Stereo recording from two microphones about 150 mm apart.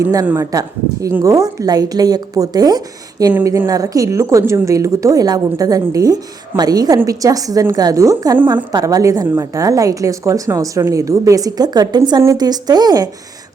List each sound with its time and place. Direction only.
0.0 s speech: 20° right (ahead or behind)